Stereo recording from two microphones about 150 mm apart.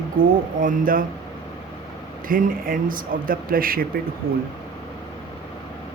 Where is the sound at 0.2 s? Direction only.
65° right (ahead or behind).